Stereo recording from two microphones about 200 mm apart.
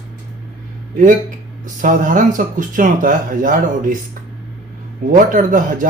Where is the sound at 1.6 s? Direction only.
40° right (ahead or behind).